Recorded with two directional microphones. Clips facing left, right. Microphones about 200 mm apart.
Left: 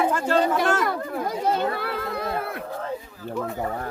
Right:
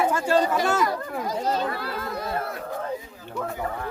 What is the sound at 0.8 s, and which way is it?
Speech, 60° left (ahead or behind).